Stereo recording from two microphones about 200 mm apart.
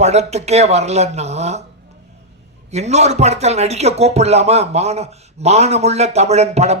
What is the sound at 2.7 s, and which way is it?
Speech, 35° right (ahead or behind).